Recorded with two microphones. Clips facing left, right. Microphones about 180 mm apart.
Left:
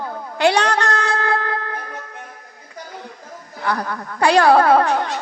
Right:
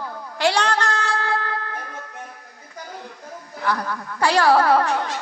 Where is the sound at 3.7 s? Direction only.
60° left (ahead or behind).